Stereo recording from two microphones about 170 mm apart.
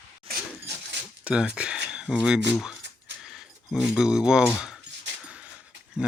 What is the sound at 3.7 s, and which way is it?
Speech, 5° right (ahead or behind).